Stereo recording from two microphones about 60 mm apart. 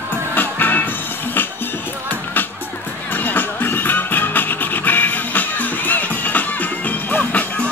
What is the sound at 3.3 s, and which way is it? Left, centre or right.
Music, left.